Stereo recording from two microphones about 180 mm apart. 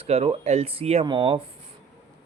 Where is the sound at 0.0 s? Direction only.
30° right (ahead or behind).